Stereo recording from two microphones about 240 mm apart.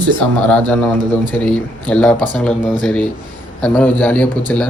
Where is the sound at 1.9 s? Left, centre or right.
Centre.